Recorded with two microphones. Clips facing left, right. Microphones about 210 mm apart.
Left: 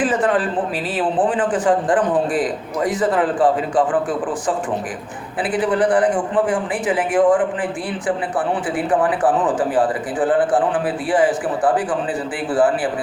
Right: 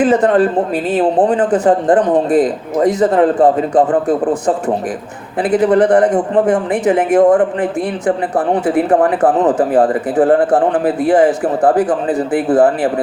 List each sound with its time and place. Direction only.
0.1 s speech: 40° right (ahead or behind)
5.4 s speech: 40° right (ahead or behind)